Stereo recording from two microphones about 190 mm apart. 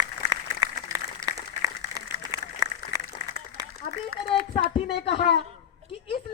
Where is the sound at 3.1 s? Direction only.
25° left (ahead or behind).